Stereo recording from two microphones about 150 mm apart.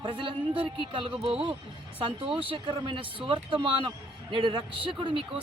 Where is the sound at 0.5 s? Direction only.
35° right (ahead or behind).